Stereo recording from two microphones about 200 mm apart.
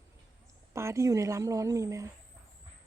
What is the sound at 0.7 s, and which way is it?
Speech, 15° right (ahead or behind).